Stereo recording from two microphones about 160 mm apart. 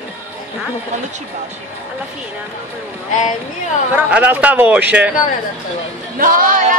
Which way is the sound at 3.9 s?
10° right (ahead or behind).